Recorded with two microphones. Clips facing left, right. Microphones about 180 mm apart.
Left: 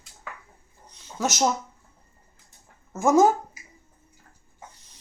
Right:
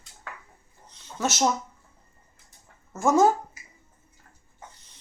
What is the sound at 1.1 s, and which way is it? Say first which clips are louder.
Speech: left 1 dB; 15° left (ahead or behind).